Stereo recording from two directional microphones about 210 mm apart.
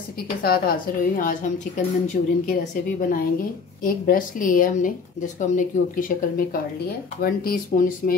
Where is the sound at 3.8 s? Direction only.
40° left (ahead or behind).